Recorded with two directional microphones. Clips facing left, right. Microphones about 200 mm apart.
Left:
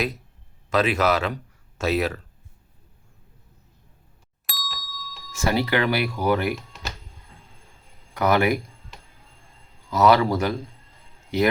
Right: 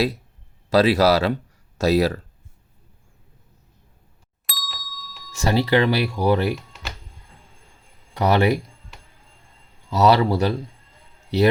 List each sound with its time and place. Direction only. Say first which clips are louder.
0.7 s speech: right 5 dB; 35° right (ahead or behind)
4.4 s ding: left 1 dB; centre (ahead or behind)
5.4 s speech: right 3 dB; 30° right (ahead or behind)
8.1 s speech: right 2 dB; 35° right (ahead or behind)
9.9 s speech: right 1 dB; 35° right (ahead or behind)